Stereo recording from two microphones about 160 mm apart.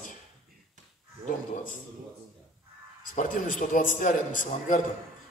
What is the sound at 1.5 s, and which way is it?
Speech, 60° left (ahead or behind).